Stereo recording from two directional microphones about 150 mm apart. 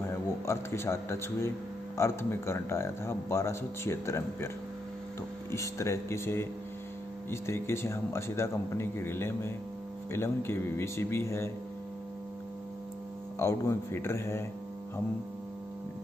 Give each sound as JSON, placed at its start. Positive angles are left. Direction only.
{"t": 0.1, "sound": "a man's voice", "side_deg": 20}
{"t": 5.5, "sound": "speech", "side_deg": 20}
{"t": 13.4, "sound": "speech", "side_deg": 20}